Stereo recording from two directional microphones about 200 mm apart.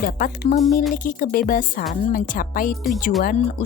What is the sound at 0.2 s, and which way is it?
Speech, 45° left (ahead or behind).